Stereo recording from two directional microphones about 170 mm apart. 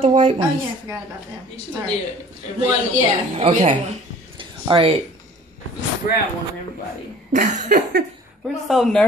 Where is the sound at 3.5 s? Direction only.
50° right (ahead or behind).